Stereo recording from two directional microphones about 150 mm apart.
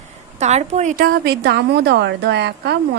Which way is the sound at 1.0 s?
85° right.